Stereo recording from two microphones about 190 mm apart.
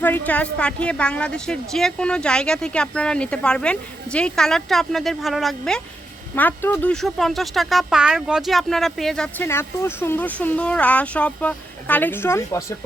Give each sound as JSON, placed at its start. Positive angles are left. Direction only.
{"t": 0.0, "sound": "a woman's voice", "side_deg": 10}